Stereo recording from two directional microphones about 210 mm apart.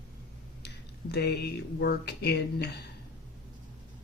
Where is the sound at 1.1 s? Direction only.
50° left (ahead or behind).